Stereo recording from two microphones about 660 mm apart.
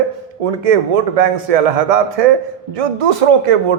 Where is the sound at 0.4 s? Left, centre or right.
Right.